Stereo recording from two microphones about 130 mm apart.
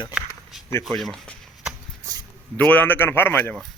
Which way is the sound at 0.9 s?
Centre (ahead or behind).